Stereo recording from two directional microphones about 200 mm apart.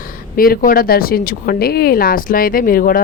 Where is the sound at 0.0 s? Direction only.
45° left (ahead or behind).